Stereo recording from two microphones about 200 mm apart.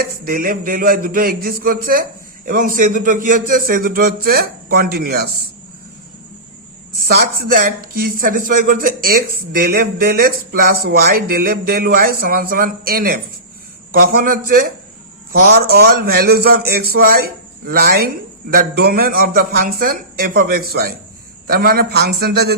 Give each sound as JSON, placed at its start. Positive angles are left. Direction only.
{"t": 0.0, "sound": "a man's voice", "side_deg": -45}
{"t": 7.1, "sound": "a man's voice", "side_deg": -45}